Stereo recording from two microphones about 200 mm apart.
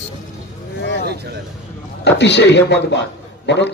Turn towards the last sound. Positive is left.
turn(degrees=60)  # may be behind; listen again after turning